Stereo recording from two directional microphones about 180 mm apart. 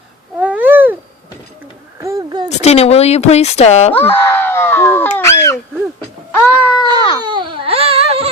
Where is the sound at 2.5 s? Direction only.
35° left (ahead or behind).